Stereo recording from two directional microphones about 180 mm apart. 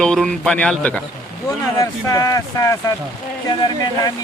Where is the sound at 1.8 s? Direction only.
20° left (ahead or behind).